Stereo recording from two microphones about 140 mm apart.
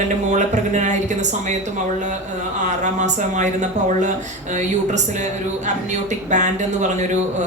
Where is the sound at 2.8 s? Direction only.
60° right (ahead or behind).